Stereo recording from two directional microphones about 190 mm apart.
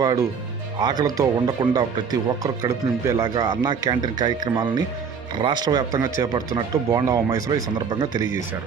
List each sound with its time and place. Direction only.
0.0 s speech: 20° right (ahead or behind)